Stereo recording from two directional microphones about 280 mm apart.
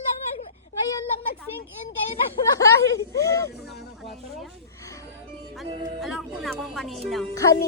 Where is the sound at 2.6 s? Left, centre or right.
Centre.